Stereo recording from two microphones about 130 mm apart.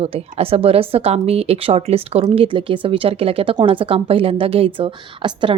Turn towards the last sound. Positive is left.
turn(degrees=-40)  # may be behind; listen again after turning